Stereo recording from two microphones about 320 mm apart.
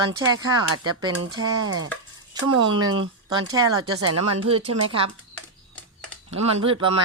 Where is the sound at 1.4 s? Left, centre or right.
Right.